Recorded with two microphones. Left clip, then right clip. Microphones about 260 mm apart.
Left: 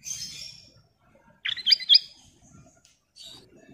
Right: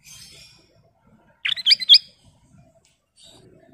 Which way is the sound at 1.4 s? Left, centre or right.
Right.